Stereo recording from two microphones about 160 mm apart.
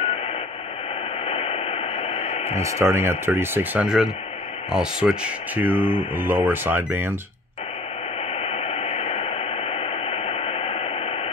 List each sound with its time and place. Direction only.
1.2 s radio: 40° left (ahead or behind)
2.5 s speech: 15° right (ahead or behind)
8.4 s radio: 40° left (ahead or behind)